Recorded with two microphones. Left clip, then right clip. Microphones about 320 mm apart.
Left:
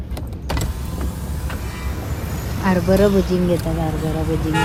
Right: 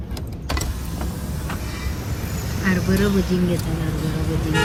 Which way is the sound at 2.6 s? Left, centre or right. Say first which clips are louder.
Left 6 dB; centre.